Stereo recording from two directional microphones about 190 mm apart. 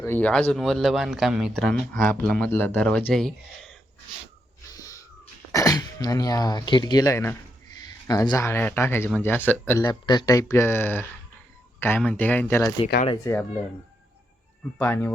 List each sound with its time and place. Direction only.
0.0 s speech: 10° left (ahead or behind)
4.7 s a sound: 20° left (ahead or behind)
5.5 s speech: 20° left (ahead or behind)
14.8 s speech: 10° left (ahead or behind)